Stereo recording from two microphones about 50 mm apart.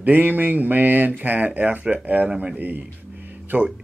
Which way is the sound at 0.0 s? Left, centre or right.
Right.